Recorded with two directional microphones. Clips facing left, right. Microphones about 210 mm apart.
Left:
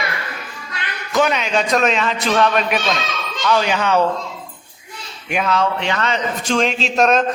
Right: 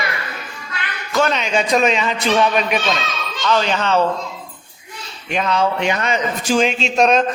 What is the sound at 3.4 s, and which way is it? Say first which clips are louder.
Speech: even; 10° left (ahead or behind).